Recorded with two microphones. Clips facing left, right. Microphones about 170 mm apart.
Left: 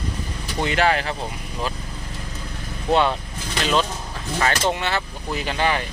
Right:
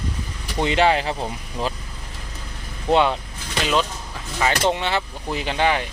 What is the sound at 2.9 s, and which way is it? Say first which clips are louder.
Speech: right 1 dB; 15° right (ahead or behind).